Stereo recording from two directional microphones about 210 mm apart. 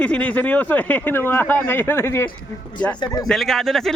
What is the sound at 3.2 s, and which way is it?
Speech, centre (ahead or behind).